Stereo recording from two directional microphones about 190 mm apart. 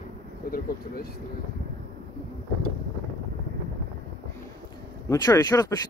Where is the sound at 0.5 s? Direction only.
50° left (ahead or behind).